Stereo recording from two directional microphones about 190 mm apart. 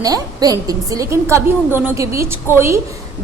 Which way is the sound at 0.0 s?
20° right (ahead or behind).